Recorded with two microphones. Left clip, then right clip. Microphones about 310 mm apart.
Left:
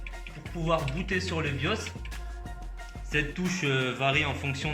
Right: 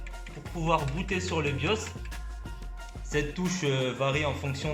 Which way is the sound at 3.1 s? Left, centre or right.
Centre.